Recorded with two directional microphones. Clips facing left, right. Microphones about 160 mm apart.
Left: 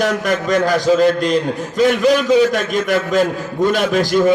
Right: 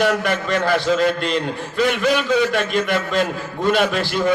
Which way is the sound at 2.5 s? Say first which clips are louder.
Left 2 dB; 45° left (ahead or behind).